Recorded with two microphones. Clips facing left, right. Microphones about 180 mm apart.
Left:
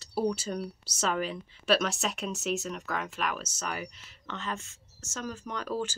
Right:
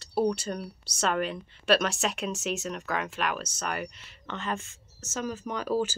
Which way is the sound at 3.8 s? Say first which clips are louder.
Right 3 dB; 70° right (ahead or behind).